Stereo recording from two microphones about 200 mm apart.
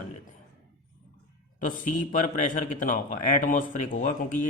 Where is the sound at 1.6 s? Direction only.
40° left (ahead or behind).